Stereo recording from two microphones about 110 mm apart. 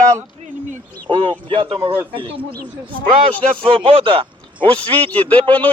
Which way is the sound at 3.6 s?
55° right (ahead or behind).